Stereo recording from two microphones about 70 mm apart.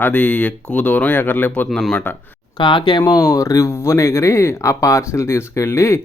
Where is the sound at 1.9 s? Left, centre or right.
Left.